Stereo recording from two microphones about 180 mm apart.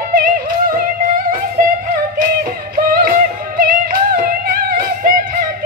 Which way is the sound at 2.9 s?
55° right (ahead or behind).